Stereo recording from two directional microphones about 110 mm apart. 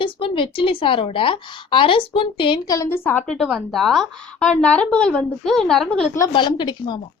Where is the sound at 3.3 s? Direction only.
Centre (ahead or behind).